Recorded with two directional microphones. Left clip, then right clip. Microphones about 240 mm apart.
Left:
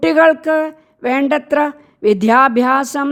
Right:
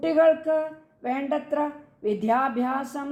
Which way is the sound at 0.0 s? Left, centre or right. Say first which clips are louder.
Left 8 dB; left.